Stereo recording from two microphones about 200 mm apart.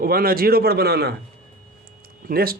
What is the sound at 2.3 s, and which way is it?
Speech, 50° right (ahead or behind).